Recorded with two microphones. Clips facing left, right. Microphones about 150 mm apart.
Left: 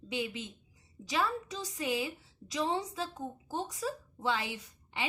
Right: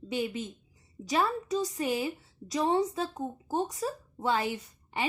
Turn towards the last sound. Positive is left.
turn(degrees=-45)  # may be behind; listen again after turning